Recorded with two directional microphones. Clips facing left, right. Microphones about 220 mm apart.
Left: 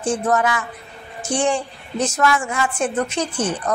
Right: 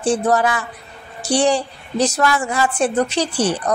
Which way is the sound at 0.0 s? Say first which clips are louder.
Right 3 dB; 35° right (ahead or behind).